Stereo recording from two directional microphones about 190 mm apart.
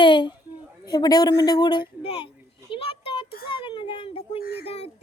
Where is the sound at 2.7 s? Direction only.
30° left (ahead or behind).